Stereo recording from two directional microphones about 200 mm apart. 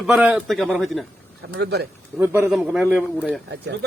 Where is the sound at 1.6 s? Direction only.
55° right (ahead or behind).